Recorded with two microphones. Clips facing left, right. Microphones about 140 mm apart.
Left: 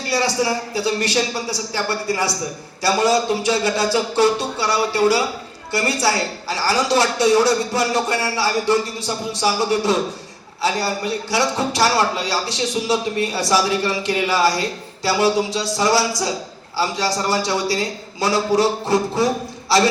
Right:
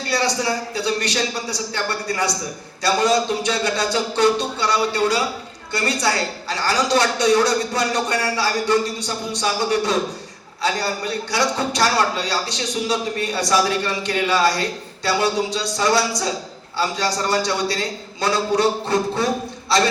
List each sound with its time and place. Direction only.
0.1 s a man's voice: 25° left (ahead or behind)